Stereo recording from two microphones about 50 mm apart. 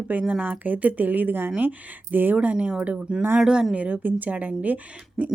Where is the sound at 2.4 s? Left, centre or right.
Right.